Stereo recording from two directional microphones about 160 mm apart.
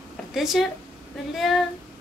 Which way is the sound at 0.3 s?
Centre (ahead or behind).